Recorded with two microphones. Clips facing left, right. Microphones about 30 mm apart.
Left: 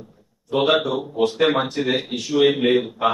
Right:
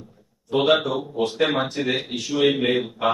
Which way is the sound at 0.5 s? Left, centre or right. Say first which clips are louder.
Left 1 dB; centre.